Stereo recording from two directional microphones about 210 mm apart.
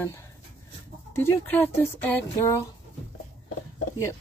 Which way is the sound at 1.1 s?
10° left (ahead or behind).